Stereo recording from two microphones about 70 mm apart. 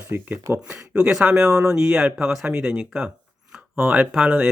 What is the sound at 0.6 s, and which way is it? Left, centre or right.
Speech, centre.